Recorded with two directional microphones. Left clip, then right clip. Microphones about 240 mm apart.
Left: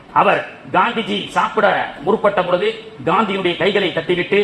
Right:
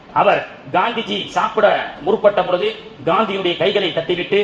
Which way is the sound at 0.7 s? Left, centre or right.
Left.